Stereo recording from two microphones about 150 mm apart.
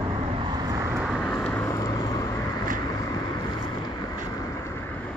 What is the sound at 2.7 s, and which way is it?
Boat, 20° left (ahead or behind).